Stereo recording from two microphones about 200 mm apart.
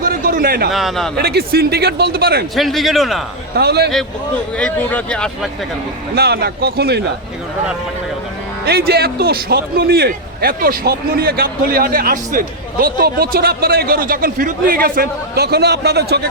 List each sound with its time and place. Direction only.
0.0 s a sound: 45° right (ahead or behind)
0.7 s speech: centre (ahead or behind)
1.2 s a man's voice: 50° right (ahead or behind)
2.6 s speech: centre (ahead or behind)
3.5 s a man's voice: 55° right (ahead or behind)
4.5 s speech: 5° left (ahead or behind)
6.1 s a man's voice: 50° right (ahead or behind)
8.6 s a man's voice: 50° right (ahead or behind)